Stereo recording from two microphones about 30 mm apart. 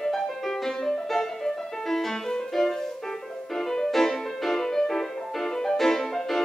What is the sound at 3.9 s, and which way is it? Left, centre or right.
Music, centre.